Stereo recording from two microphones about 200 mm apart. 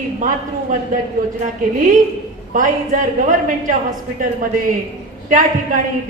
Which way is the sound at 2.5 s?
40° right (ahead or behind).